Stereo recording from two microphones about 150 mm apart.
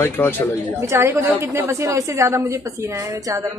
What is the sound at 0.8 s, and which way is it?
A woman's voice, 20° right (ahead or behind).